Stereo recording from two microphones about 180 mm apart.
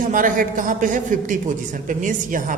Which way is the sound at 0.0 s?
50° right (ahead or behind).